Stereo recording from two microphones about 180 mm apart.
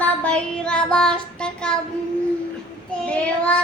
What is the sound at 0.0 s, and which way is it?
Child singing, 5° left (ahead or behind).